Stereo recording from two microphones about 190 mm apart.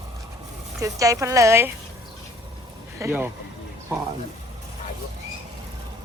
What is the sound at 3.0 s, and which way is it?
Speech, 10° right (ahead or behind).